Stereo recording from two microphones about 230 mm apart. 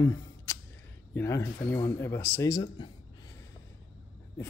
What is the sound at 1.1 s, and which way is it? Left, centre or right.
Speech, centre.